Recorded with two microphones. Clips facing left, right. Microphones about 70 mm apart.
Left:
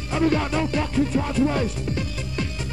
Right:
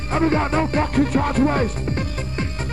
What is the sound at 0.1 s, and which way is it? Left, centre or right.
Music, right.